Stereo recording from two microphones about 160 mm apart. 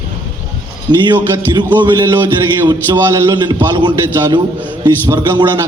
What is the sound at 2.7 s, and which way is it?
Speech, 25° right (ahead or behind).